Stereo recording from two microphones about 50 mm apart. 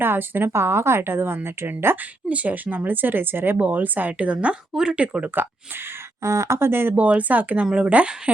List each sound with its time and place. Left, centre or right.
0.0 s speech: right
0.5 s a woman's voice: right
2.3 s speech: right
6.2 s speech: right
6.6 s speech: right
6.9 s speech: right